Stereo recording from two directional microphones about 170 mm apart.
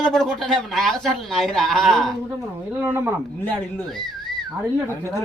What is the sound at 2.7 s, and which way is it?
Speech, 10° right (ahead or behind).